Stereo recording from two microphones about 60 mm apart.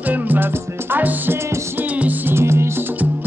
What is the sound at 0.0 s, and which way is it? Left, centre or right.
Music, right.